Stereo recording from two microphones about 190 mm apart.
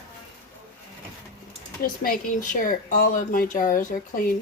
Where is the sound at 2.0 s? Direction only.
50° left (ahead or behind).